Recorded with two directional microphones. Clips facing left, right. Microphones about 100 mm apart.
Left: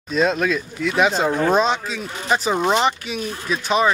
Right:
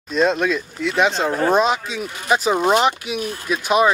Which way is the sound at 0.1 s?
Centre (ahead or behind).